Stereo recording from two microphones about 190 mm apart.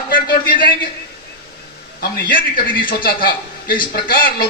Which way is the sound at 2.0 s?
50° left (ahead or behind).